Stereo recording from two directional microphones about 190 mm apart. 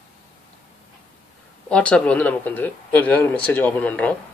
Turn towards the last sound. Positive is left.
turn(degrees=5)  # may be behind; listen again after turning